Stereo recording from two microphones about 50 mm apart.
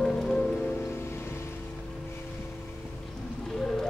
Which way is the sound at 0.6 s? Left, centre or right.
Left.